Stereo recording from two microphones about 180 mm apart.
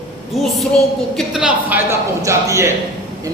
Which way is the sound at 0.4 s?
Centre (ahead or behind).